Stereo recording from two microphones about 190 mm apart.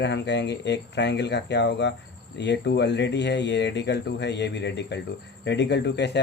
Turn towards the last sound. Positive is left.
turn(degrees=65)  # may be behind; listen again after turning